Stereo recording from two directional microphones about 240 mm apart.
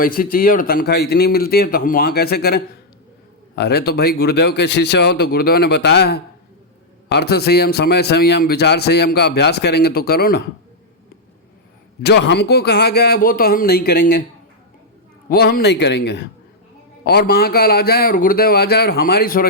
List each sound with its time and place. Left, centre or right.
0.0 s a man's voice: left
12.0 s a man's voice: left
15.3 s a man's voice: left